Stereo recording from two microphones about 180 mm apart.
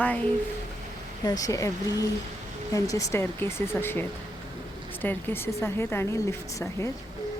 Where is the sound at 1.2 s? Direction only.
20° left (ahead or behind).